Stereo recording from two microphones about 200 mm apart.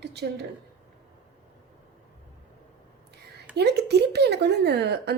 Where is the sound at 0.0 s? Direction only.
55° right (ahead or behind).